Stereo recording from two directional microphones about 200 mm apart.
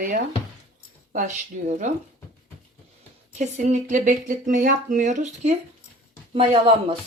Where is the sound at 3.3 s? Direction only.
35° right (ahead or behind).